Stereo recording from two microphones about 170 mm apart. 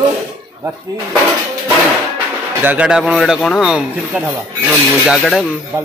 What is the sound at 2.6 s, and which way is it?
Speech, 10° right (ahead or behind).